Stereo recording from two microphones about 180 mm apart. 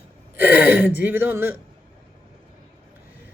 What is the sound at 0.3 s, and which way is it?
Speech, 10° right (ahead or behind).